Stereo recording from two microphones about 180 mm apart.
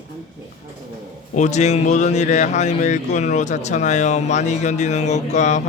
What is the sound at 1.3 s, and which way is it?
Speech, 40° left (ahead or behind).